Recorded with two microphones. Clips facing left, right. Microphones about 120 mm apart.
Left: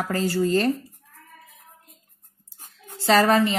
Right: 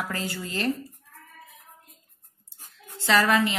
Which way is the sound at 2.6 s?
40° left (ahead or behind).